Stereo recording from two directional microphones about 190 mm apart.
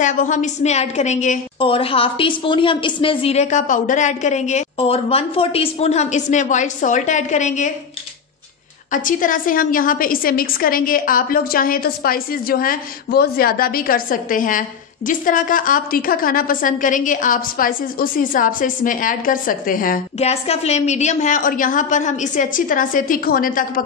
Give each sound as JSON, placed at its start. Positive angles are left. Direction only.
{"t": 0.0, "sound": "a woman's voice", "side_deg": 40}
{"t": 1.6, "sound": "a woman's voice", "side_deg": 30}
{"t": 8.9, "sound": "a woman's voice", "side_deg": 45}
{"t": 20.2, "sound": "a woman's voice", "side_deg": 35}